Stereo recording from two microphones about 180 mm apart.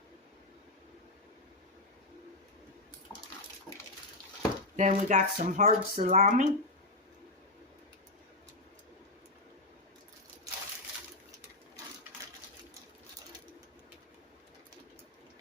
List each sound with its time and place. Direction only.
4.8 s speech: 40° right (ahead or behind)